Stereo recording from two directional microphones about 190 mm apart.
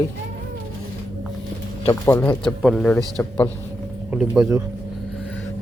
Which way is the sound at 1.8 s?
15° left (ahead or behind).